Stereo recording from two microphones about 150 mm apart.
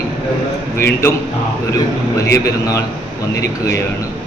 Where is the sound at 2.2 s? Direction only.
20° left (ahead or behind).